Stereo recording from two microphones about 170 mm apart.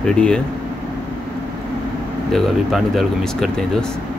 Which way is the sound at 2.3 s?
Centre (ahead or behind).